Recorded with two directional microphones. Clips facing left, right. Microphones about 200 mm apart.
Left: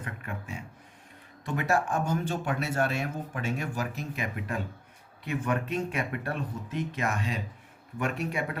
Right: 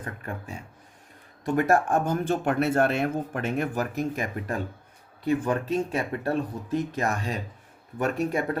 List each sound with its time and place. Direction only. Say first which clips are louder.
0.0 s speech: right 3 dB; 40° right (ahead or behind)